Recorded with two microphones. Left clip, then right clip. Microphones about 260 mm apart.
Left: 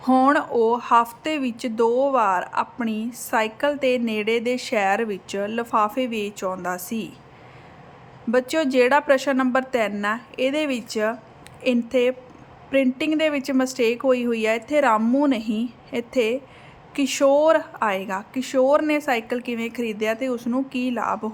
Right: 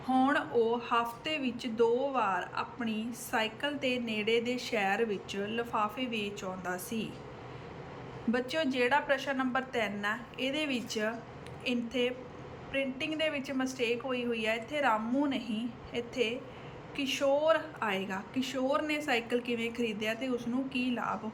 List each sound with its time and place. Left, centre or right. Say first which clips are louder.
0.0 s speech: left 11 dB; centre
8.3 s a woman's voice: left 11 dB; centre
21.2 s speech: left 12 dB; left